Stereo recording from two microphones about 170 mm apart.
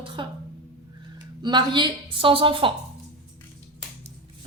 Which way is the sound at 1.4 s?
25° right (ahead or behind).